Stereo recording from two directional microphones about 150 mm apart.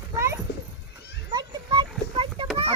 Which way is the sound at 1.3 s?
30° right (ahead or behind).